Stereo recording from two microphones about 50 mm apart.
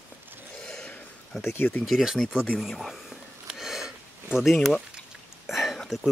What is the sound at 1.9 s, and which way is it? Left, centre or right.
Speech, centre.